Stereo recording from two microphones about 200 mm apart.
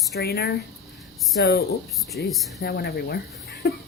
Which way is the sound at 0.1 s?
50° left (ahead or behind).